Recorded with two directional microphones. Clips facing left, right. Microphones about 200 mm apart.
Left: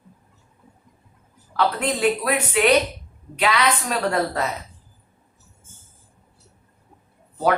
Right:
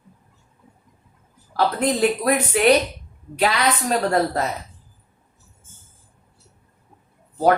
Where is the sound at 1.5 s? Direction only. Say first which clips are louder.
Right 2 dB; 40° right (ahead or behind).